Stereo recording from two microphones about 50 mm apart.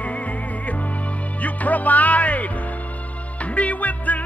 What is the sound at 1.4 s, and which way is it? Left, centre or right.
Music, left.